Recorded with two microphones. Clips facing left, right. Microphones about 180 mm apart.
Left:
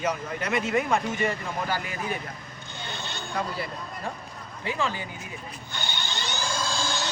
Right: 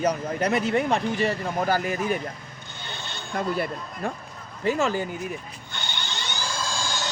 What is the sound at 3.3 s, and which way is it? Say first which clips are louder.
Speech: right 5 dB; 55° right (ahead or behind).